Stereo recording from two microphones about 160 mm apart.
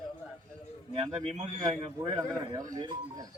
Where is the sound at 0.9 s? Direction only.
35° right (ahead or behind).